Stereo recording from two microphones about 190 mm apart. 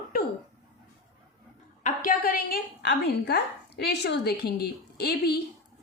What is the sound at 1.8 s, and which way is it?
A woman's voice, 45° left (ahead or behind).